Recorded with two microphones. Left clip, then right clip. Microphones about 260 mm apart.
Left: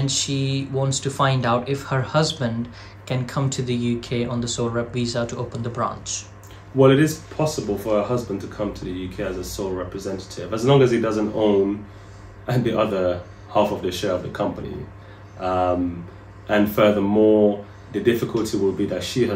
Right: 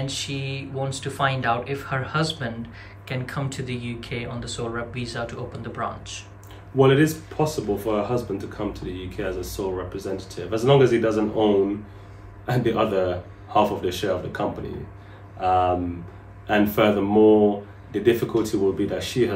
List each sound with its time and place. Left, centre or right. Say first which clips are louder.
0.0 s speech: left 5 dB; centre
6.8 s speech: left 2 dB; centre
15.4 s speech: right 1 dB; centre